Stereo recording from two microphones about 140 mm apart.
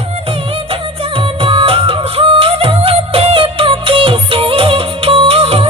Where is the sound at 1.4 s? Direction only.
40° right (ahead or behind).